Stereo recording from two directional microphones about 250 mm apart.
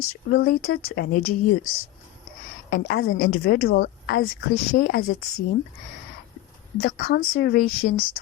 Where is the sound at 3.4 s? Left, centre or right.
Left.